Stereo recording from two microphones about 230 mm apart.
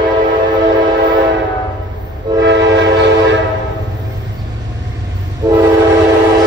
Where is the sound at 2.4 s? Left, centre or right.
Right.